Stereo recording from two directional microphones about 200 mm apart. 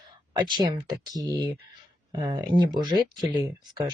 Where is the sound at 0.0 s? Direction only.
20° right (ahead or behind).